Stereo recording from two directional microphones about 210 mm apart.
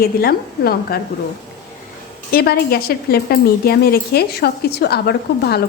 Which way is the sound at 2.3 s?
50° left (ahead or behind).